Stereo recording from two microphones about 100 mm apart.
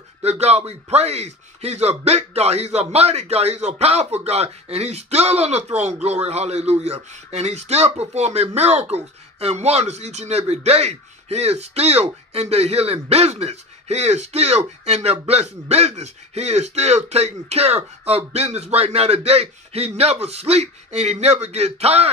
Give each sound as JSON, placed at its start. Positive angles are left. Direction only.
{"t": 0.2, "sound": "speech", "side_deg": -90}